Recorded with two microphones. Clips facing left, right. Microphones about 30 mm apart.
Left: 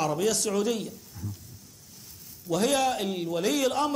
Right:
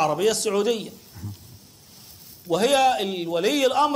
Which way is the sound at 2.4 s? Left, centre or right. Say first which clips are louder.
Right 6 dB; right.